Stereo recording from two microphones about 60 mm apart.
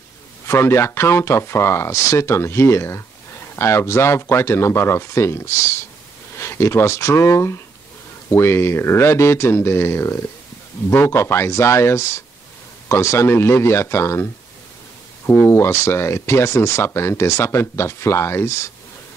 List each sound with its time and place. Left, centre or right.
0.5 s speech: left
15.2 s speech: left